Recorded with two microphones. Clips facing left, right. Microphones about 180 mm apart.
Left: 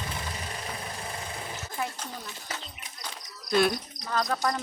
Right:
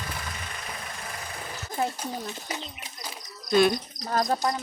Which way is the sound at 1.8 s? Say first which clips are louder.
Right 6 dB; 35° right (ahead or behind).